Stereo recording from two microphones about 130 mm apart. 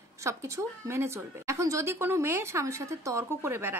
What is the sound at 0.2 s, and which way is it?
A woman's voice, 20° right (ahead or behind).